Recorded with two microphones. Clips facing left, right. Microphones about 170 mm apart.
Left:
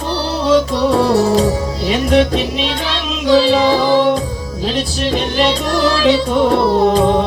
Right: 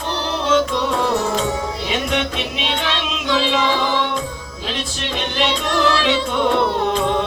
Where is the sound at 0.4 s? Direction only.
35° left (ahead or behind).